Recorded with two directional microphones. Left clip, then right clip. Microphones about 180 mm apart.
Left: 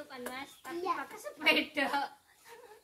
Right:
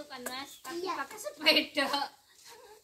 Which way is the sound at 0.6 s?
15° right (ahead or behind).